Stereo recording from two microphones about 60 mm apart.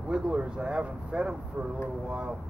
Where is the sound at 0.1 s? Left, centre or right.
Centre.